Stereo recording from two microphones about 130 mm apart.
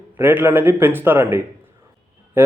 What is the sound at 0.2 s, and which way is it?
A man's voice, 15° right (ahead or behind).